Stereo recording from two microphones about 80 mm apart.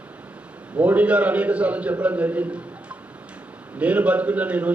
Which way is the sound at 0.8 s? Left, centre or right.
Centre.